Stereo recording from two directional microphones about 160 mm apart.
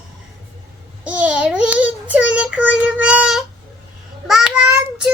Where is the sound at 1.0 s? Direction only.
10° right (ahead or behind).